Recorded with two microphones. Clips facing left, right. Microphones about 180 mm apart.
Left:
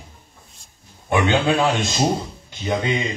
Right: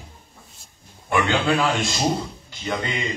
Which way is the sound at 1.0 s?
20° left (ahead or behind).